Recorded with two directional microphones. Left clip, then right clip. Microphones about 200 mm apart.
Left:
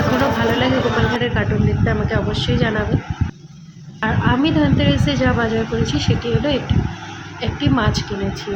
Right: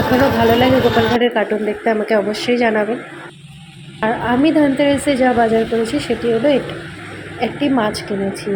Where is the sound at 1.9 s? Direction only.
15° right (ahead or behind).